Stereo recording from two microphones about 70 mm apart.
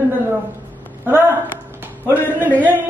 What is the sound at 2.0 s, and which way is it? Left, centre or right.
Speech, left.